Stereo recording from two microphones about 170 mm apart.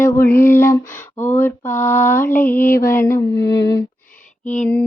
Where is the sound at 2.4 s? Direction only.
55° left (ahead or behind).